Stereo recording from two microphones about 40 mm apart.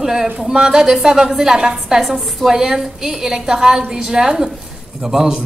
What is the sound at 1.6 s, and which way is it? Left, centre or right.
Speech, right.